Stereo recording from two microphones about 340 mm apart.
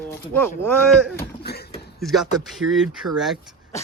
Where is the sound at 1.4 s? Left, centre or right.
Left.